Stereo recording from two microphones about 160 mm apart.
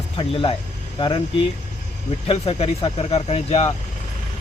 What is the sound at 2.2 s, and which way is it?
A man's voice, 35° left (ahead or behind).